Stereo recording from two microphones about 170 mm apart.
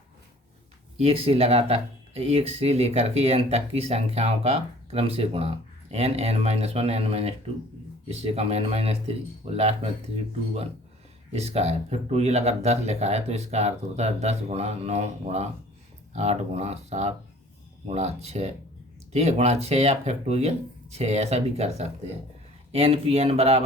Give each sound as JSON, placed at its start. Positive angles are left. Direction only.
{"t": 1.0, "sound": "speech", "side_deg": -35}
{"t": 11.3, "sound": "speech", "side_deg": -40}